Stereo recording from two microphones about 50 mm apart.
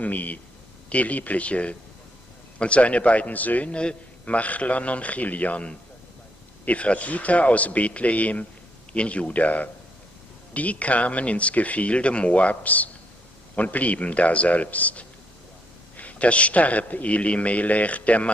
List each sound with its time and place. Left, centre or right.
0.0 s a man's voice: left